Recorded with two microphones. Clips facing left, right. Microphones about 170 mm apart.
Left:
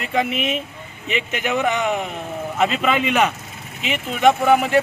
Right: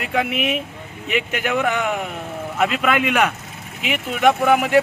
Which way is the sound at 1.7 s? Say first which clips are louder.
Left 1 dB; 10° right (ahead or behind).